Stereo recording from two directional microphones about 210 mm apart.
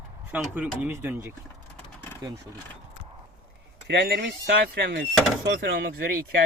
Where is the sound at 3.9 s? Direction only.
50° right (ahead or behind).